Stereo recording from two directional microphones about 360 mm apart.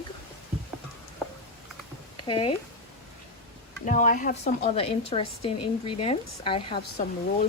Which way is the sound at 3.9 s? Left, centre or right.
Left.